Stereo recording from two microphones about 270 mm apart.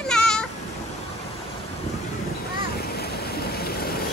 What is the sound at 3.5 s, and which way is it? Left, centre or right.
Vehicle, left.